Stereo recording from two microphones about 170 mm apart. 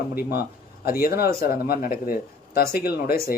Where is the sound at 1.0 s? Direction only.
65° left (ahead or behind).